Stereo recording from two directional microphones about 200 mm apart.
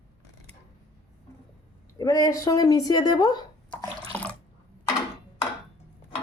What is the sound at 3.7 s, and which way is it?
Water, 5° left (ahead or behind).